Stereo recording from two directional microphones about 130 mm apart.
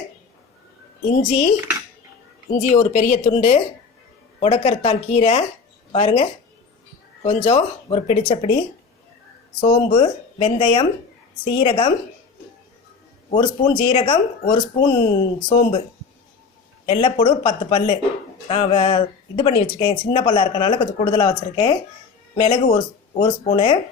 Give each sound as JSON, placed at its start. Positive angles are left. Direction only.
{"t": 1.1, "sound": "speech", "side_deg": 65}
{"t": 2.5, "sound": "speech", "side_deg": 75}
{"t": 9.6, "sound": "speech", "side_deg": 40}
{"t": 13.3, "sound": "speech", "side_deg": 40}
{"t": 16.8, "sound": "speech", "side_deg": 50}